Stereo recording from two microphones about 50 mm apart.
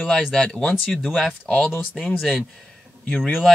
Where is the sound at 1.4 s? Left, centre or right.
Left.